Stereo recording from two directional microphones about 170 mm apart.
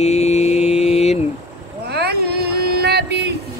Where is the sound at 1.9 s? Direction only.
70° right (ahead or behind).